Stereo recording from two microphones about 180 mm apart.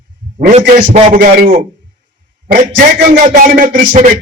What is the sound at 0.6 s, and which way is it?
Speech, 50° right (ahead or behind).